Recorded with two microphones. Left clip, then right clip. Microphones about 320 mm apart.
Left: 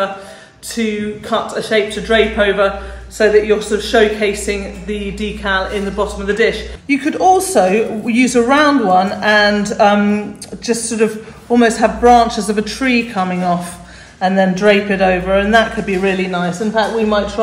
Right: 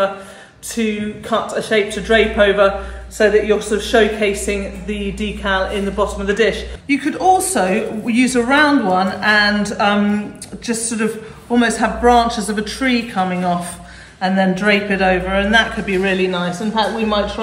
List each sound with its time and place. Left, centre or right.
0.7 s a woman's voice: centre
7.6 s speech: left
11.5 s speech: left